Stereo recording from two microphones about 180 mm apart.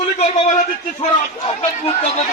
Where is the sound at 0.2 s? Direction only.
40° left (ahead or behind).